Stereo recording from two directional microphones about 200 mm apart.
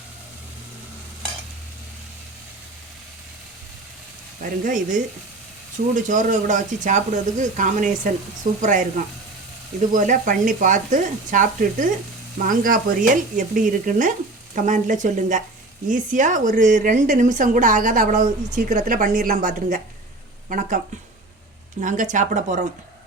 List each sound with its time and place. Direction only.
4.4 s speech: 40° right (ahead or behind)
21.8 s speech: 40° right (ahead or behind)